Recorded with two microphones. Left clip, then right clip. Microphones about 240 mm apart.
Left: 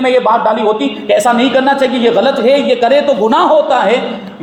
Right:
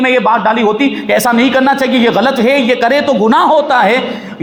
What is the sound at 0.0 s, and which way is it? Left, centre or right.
A man's voice, right.